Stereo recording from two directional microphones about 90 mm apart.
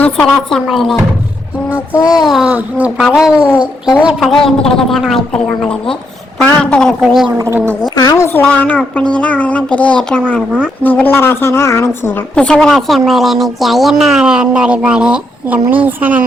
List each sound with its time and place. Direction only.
0.0 s a woman's voice: 15° left (ahead or behind)
0.5 s a woman's voice: centre (ahead or behind)
2.2 s a woman's voice: centre (ahead or behind)
2.5 s a woman's voice: 15° right (ahead or behind)
4.2 s a woman's voice: 5° left (ahead or behind)
7.0 s a woman's voice: centre (ahead or behind)
7.5 s speech: 25° right (ahead or behind)
7.9 s a woman's voice: 40° left (ahead or behind)
8.3 s a woman's voice: 20° left (ahead or behind)
12.3 s a woman's voice: 10° left (ahead or behind); by 16.2 s 20° right (ahead or behind)